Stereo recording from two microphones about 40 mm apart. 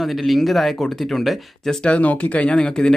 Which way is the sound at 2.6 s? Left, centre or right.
Left.